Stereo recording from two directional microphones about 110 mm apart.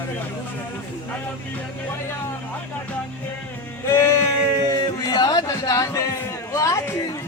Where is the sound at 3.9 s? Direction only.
25° left (ahead or behind).